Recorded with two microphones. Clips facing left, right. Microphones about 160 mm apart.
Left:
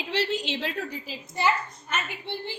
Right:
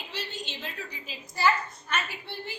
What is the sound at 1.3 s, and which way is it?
Speech, 20° left (ahead or behind).